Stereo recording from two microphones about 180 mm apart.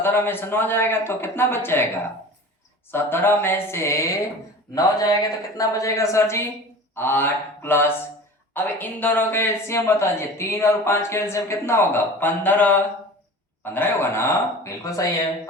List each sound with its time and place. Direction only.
0.0 s speech: 10° left (ahead or behind)
2.9 s a woman's voice: 10° left (ahead or behind)